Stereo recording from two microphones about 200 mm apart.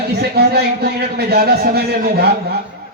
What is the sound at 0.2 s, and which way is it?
A man's voice, 55° right (ahead or behind).